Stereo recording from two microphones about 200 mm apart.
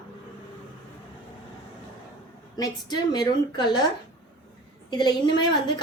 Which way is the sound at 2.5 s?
20° left (ahead or behind).